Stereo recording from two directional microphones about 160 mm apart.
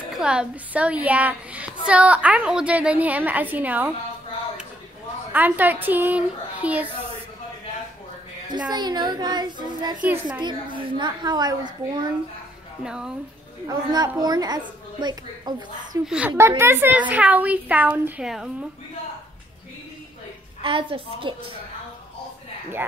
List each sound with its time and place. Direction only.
0.2 s a woman's voice: 5° right (ahead or behind)
5.3 s a woman's voice: 10° right (ahead or behind)
8.5 s a woman's voice: 25° right (ahead or behind)
12.8 s speech: 5° right (ahead or behind)
13.7 s a woman's voice: 25° right (ahead or behind)
16.1 s a woman's voice: 10° right (ahead or behind)
20.6 s a woman's voice: 30° right (ahead or behind)